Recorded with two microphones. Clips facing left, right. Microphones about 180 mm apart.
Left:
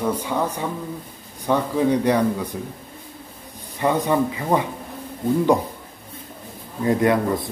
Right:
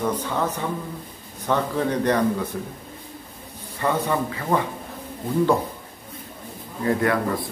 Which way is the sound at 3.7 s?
15° left (ahead or behind).